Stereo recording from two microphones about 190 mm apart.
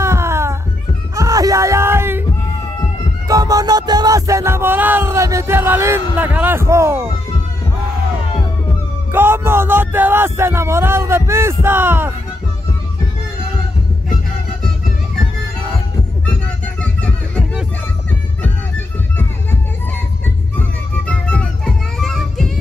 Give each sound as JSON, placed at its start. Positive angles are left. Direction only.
{"t": 0.0, "sound": "music", "side_deg": -15}
{"t": 3.3, "sound": "music", "side_deg": -20}
{"t": 9.1, "sound": "music", "side_deg": -10}
{"t": 21.1, "sound": "music", "side_deg": 5}